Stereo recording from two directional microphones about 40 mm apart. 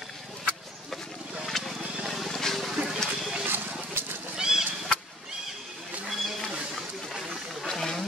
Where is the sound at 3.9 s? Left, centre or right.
Right.